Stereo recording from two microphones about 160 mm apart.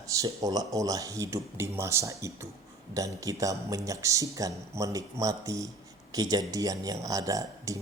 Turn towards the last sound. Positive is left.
turn(degrees=-20)  # may be behind; listen again after turning